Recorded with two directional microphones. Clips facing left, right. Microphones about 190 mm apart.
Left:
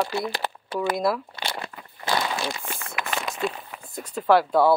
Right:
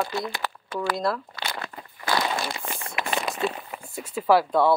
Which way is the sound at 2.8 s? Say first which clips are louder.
Right 2 dB; 30° right (ahead or behind).